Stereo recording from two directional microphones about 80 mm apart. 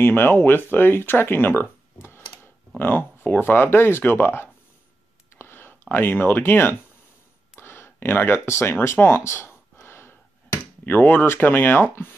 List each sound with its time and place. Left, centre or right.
0.0 s speech: left
7.6 s a sound: left
11.9 s speech: left